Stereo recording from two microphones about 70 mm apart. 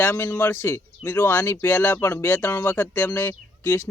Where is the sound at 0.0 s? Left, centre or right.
Left.